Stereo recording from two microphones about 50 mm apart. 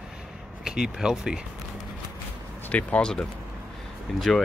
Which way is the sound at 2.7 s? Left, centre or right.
Left.